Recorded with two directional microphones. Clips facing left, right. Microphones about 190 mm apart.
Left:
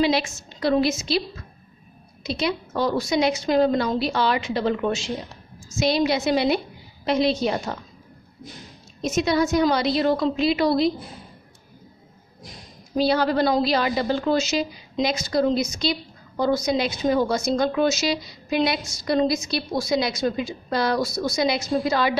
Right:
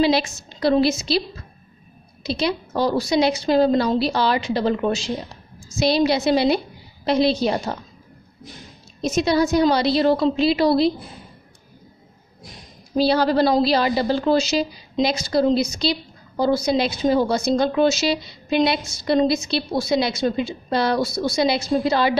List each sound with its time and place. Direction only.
0.0 s a woman's voice: 35° right (ahead or behind)
2.2 s a woman's voice: 35° right (ahead or behind)
9.0 s a woman's voice: 35° right (ahead or behind)
12.9 s a woman's voice: 35° right (ahead or behind)